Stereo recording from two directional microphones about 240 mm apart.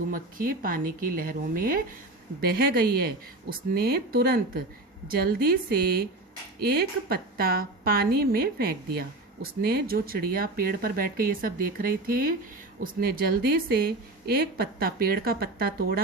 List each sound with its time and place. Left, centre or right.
0.1 s a woman's voice: right